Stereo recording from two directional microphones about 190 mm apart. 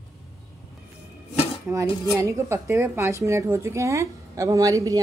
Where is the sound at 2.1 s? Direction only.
15° right (ahead or behind).